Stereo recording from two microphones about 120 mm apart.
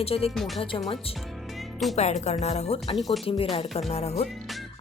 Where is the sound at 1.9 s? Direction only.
70° left (ahead or behind).